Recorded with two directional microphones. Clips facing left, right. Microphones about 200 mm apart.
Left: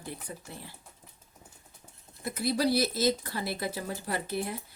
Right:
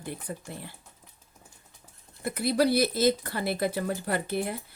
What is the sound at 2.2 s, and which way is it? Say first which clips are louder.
Speech: right 4 dB; 60° right (ahead or behind).